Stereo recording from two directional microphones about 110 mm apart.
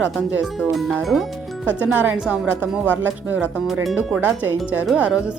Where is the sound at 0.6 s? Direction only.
Centre (ahead or behind).